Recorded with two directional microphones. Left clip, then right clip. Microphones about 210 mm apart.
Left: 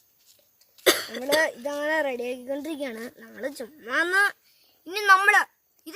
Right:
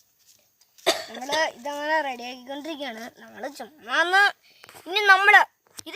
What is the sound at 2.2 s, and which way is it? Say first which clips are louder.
A woman's voice: left 3 dB; 45° right (ahead or behind).